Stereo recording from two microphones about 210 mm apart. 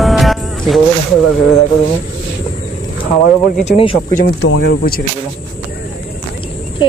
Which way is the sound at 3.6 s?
30° left (ahead or behind).